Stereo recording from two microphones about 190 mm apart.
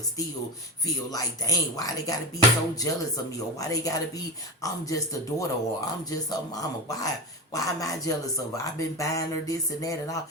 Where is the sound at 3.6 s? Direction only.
20° left (ahead or behind).